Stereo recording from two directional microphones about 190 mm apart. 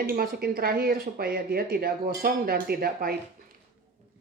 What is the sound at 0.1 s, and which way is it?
Speech, 55° right (ahead or behind).